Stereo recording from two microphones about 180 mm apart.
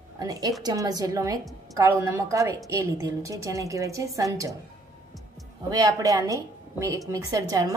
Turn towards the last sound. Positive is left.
turn(degrees=-20)  # may be behind; listen again after turning